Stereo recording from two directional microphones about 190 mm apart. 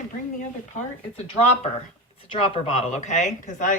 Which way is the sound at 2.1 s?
25° left (ahead or behind).